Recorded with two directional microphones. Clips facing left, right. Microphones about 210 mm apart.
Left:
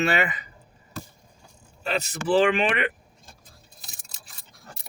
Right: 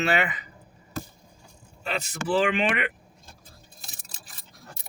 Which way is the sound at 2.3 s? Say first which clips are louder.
Left 3 dB; 30° left (ahead or behind).